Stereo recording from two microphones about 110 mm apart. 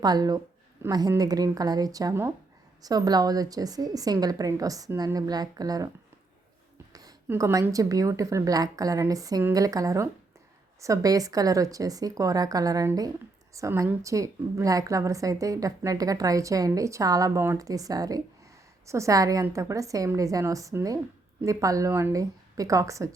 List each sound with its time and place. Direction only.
0.0 s a woman's voice: 35° right (ahead or behind)
7.3 s a woman's voice: 25° right (ahead or behind)